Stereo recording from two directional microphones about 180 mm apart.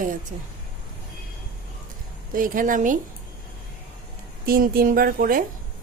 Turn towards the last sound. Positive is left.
turn(degrees=-50)  # may be behind; listen again after turning